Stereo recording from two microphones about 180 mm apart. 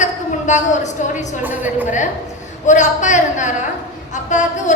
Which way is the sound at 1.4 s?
10° right (ahead or behind).